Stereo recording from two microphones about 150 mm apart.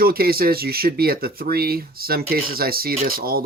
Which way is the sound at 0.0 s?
80° right.